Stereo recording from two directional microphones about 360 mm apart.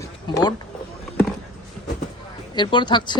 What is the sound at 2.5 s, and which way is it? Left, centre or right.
Speech, centre.